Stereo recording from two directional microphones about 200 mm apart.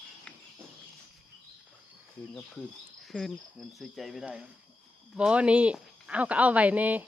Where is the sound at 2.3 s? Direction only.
5° left (ahead or behind).